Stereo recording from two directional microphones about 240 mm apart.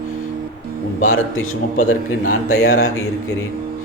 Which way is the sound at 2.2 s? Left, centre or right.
Left.